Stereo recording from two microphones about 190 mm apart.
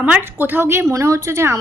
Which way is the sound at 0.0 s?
10° right (ahead or behind).